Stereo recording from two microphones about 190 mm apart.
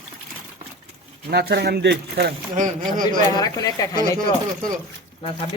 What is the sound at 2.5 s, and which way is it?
Speech, 45° right (ahead or behind).